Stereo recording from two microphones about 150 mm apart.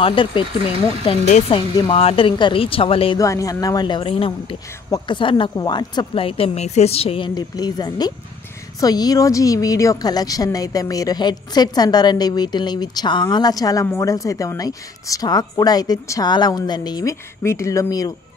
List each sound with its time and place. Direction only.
0.0 s a woman's voice: 35° left (ahead or behind)
3.2 s a woman's voice: 20° left (ahead or behind)